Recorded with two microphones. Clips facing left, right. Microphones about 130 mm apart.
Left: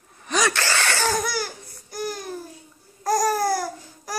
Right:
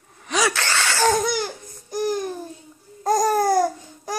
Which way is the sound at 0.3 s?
Centre (ahead or behind).